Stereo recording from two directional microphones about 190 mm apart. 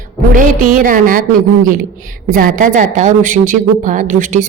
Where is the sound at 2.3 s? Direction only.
45° right (ahead or behind).